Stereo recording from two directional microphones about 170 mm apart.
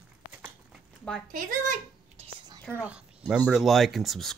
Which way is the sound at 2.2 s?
25° right (ahead or behind).